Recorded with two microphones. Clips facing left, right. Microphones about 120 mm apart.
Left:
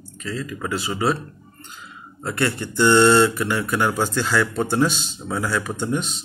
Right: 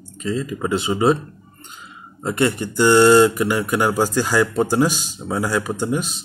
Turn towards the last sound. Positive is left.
turn(degrees=-5)  # may be behind; listen again after turning